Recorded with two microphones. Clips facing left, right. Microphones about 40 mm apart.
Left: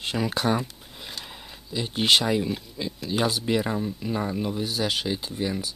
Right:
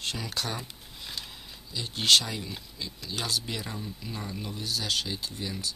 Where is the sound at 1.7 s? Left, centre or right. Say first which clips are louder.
Left 2 dB; left.